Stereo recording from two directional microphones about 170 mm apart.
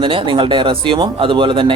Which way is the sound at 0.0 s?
30° right (ahead or behind).